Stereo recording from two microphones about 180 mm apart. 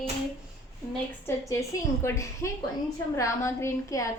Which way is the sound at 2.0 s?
15° left (ahead or behind).